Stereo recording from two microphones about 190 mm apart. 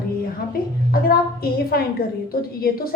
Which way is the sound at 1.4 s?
55° left (ahead or behind).